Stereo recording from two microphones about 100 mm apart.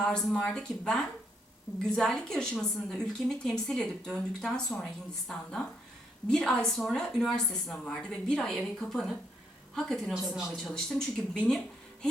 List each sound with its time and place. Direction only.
0.0 s a woman's voice: 5° left (ahead or behind)
6.2 s a woman's voice: 5° left (ahead or behind)